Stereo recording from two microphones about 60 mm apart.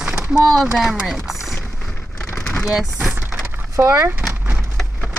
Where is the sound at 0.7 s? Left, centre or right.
Centre.